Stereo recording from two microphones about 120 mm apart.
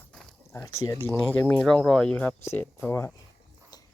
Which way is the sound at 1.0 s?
10° left (ahead or behind).